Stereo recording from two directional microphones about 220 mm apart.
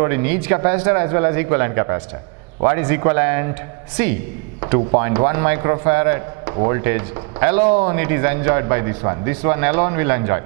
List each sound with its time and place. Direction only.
0.0 s a man's voice: 10° right (ahead or behind)